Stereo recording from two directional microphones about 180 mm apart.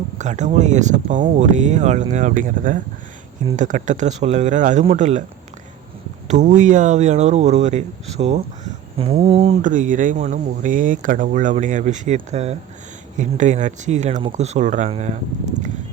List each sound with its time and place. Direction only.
0.2 s speech: 40° right (ahead or behind)
6.2 s speech: 40° right (ahead or behind)